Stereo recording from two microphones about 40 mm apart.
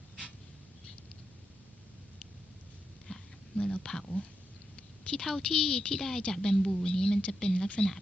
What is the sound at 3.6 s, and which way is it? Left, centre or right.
Speech, left.